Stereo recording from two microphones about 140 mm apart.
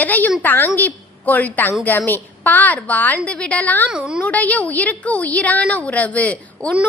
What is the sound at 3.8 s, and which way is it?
Speech, 5° right (ahead or behind).